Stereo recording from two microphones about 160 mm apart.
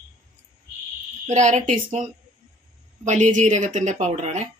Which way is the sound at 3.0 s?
50° right (ahead or behind).